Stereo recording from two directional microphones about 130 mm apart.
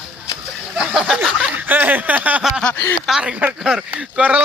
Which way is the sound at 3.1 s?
5° right (ahead or behind).